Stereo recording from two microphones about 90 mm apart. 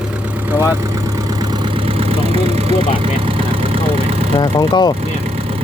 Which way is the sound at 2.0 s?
90° right.